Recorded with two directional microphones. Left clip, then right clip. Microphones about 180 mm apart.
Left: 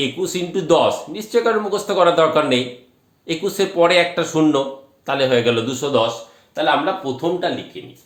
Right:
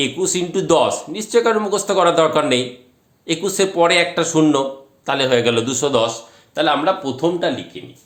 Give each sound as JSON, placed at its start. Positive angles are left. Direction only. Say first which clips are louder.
{"t": 0.0, "sound": "speech", "louder": "right 2 dB", "side_deg": -25}
{"t": 6.5, "sound": "a man's voice", "louder": "right 1 dB", "side_deg": -55}